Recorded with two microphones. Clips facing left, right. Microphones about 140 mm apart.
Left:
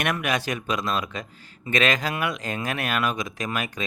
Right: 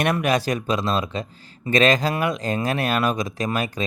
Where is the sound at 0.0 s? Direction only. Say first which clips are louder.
Right 5 dB; 35° right (ahead or behind).